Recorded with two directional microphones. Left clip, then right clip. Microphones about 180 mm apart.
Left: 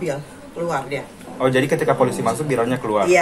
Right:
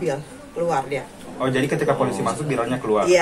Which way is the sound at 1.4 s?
50° left (ahead or behind).